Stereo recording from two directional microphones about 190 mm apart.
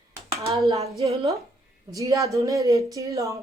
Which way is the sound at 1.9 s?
15° right (ahead or behind).